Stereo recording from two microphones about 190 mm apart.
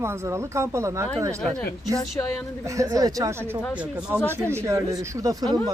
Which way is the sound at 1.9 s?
5° left (ahead or behind).